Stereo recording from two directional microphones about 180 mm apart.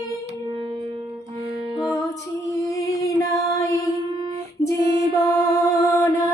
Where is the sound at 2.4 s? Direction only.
20° left (ahead or behind).